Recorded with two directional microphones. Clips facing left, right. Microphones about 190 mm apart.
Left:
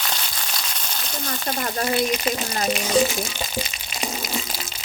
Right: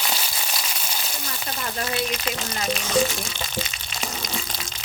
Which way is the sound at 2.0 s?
15° left (ahead or behind).